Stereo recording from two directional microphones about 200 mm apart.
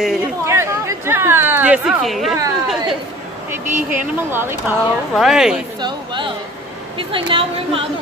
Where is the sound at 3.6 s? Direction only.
40° right (ahead or behind).